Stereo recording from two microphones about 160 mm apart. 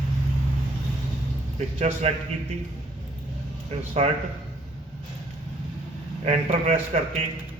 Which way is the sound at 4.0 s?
40° right (ahead or behind).